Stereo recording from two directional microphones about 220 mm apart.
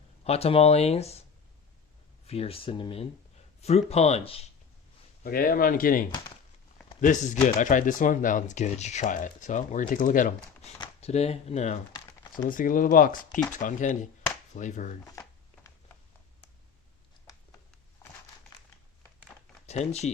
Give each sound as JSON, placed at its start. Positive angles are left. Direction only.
{"t": 0.3, "sound": "speech", "side_deg": 25}
{"t": 2.2, "sound": "speech", "side_deg": 25}
{"t": 5.2, "sound": "speech", "side_deg": 40}
{"t": 7.4, "sound": "speech", "side_deg": 35}
{"t": 18.0, "sound": "a sound", "side_deg": 15}
{"t": 19.6, "sound": "speech", "side_deg": 30}